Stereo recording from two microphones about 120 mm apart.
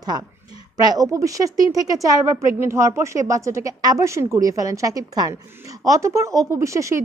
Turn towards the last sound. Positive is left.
turn(degrees=-25)  # may be behind; listen again after turning